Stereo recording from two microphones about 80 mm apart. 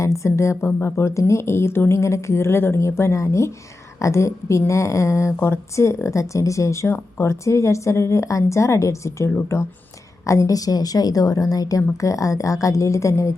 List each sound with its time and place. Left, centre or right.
0.0 s a woman's voice: left